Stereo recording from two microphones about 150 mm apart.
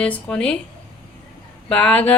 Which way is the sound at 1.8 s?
10° left (ahead or behind).